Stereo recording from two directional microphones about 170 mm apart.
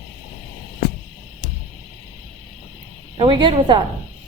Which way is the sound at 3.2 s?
30° right (ahead or behind).